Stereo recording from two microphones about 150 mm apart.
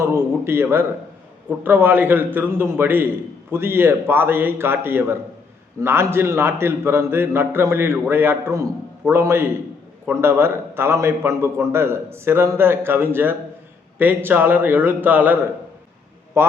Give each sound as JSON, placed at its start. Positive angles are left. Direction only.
{"t": 0.0, "sound": "a man's voice", "side_deg": -15}